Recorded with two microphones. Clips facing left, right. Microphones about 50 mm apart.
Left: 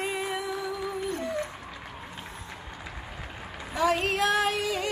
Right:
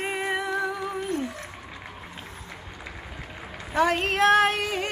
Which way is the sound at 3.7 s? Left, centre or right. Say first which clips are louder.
Right 2 dB; right.